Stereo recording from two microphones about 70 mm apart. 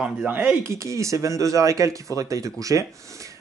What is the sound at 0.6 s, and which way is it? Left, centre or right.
Speech, right.